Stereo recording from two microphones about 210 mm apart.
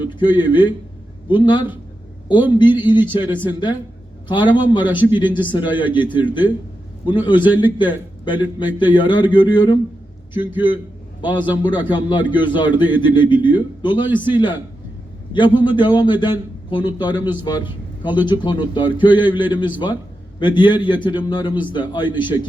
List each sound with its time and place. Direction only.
0.0 s a man's voice: 20° left (ahead or behind)